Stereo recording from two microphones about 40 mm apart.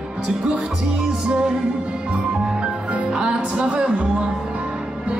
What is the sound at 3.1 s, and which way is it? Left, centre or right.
Music, right.